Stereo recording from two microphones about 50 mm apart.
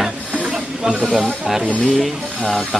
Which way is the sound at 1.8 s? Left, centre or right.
Centre.